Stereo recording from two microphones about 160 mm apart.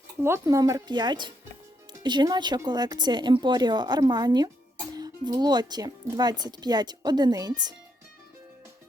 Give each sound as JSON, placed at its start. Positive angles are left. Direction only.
{"t": 0.2, "sound": "speech", "side_deg": -15}